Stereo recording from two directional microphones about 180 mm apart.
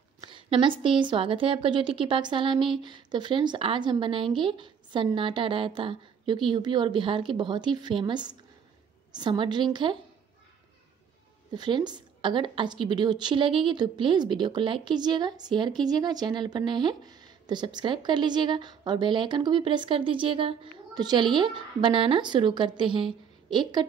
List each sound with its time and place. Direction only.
0.2 s a woman's voice: 25° right (ahead or behind)
11.5 s a woman's voice: 25° right (ahead or behind)